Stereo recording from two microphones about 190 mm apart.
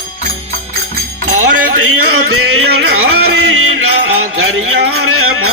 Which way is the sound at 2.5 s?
90° right.